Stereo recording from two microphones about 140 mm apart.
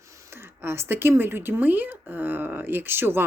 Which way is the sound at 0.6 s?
15° right (ahead or behind).